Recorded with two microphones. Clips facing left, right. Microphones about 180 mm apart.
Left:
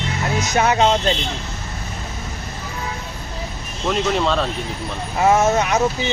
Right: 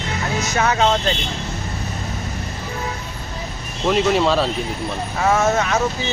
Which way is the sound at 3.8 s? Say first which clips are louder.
Right 3 dB; 5° right (ahead or behind).